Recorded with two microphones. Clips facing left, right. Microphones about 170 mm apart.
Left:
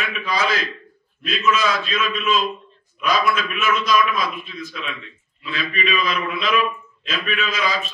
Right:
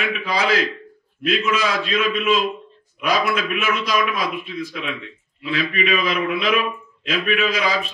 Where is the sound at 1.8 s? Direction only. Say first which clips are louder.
Right 3 dB; 70° right (ahead or behind).